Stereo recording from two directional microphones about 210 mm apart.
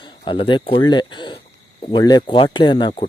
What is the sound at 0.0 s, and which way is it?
Speech, 25° left (ahead or behind).